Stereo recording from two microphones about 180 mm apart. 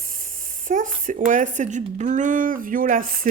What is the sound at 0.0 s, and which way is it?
Speech, 50° right (ahead or behind).